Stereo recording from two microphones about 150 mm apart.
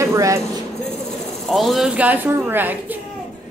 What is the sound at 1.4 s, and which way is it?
A woman's voice, centre (ahead or behind).